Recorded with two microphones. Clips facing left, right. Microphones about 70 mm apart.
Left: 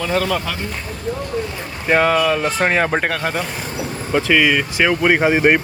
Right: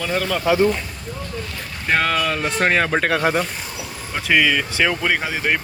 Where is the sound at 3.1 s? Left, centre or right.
Centre.